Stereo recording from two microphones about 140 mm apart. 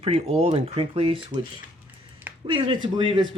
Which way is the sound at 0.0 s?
50° right (ahead or behind).